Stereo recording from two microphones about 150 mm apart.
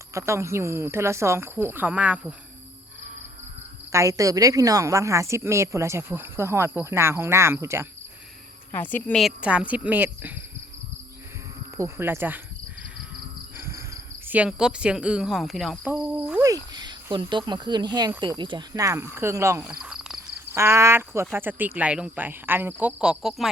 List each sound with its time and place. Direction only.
0.1 s speech: 20° right (ahead or behind)
3.9 s a woman's voice: 20° right (ahead or behind)
8.7 s a woman's voice: 10° left (ahead or behind)
9.1 s speech: 5° right (ahead or behind)
11.8 s speech: 15° right (ahead or behind)
13.6 s speech: 20° right (ahead or behind)
16.4 s a woman's voice: 25° right (ahead or behind)
19.8 s cricket: 5° right (ahead or behind)
20.5 s speech: 15° right (ahead or behind)